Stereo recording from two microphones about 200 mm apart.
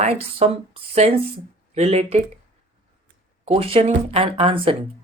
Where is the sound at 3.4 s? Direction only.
30° right (ahead or behind).